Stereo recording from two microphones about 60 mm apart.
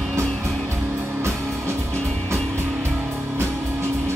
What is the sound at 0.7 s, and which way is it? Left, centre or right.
Music, right.